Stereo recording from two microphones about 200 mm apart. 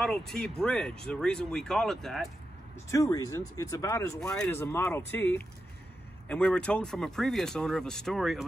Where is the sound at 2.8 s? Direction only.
15° left (ahead or behind); by 8.4 s centre (ahead or behind).